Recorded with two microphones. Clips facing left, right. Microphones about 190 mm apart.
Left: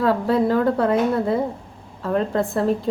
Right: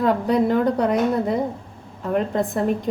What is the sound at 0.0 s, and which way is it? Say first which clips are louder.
A woman's voice: even; 15° right (ahead or behind).